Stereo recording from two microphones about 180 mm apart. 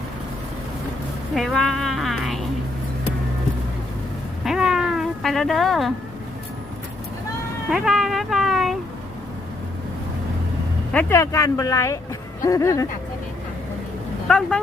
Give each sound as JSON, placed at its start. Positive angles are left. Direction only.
{"t": 1.4, "sound": "speech", "side_deg": 0}
{"t": 4.4, "sound": "a sound", "side_deg": -5}
{"t": 7.7, "sound": "speech", "side_deg": 0}
{"t": 10.9, "sound": "speech", "side_deg": 15}
{"t": 14.3, "sound": "speech", "side_deg": 5}